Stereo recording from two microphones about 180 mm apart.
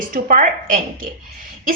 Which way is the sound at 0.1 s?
45° right (ahead or behind).